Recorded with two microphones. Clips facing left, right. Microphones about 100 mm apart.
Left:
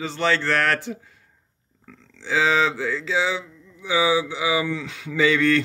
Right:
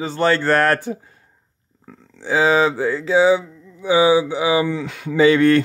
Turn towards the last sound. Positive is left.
turn(degrees=-50)  # may be behind; listen again after turning